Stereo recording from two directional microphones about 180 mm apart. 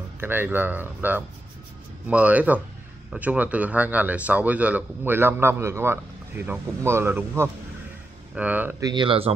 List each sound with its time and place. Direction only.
0.2 s speech: 10° right (ahead or behind); by 9.3 s 30° right (ahead or behind)